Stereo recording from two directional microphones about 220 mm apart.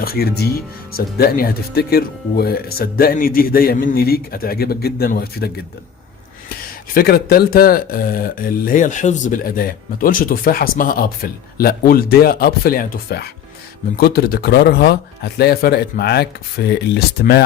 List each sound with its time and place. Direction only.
0.0 s speech: 45° left (ahead or behind)
6.9 s speech: 45° left (ahead or behind)